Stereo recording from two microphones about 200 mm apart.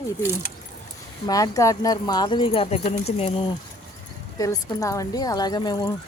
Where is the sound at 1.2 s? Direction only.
20° left (ahead or behind).